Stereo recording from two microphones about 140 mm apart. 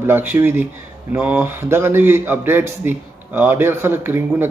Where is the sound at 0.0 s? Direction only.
15° right (ahead or behind).